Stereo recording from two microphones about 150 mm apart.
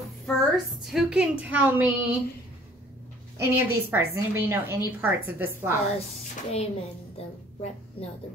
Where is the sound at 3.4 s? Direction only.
15° right (ahead or behind).